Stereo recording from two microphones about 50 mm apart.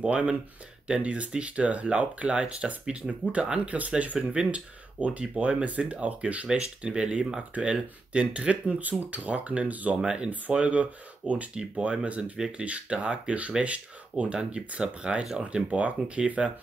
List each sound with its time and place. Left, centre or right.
0.0 s speech: right